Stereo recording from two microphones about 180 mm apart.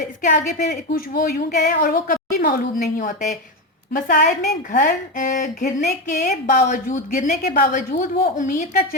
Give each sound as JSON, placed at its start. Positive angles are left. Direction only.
{"t": 0.0, "sound": "a woman's voice", "side_deg": 45}